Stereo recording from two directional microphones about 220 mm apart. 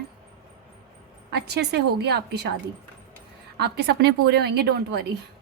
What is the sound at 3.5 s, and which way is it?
A woman's voice, 50° right (ahead or behind).